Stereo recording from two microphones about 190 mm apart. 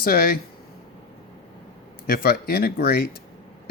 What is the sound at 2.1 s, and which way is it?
Speech, 50° left (ahead or behind).